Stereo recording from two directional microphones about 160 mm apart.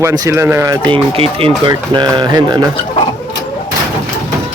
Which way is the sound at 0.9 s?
35° right (ahead or behind).